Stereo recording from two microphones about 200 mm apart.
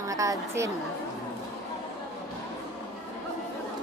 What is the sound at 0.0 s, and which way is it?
Speech, 15° right (ahead or behind).